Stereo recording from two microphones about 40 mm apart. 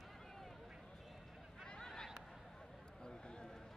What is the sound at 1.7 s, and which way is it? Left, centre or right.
Honk, centre.